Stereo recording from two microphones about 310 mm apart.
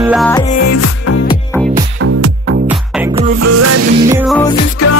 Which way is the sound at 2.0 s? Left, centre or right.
Right.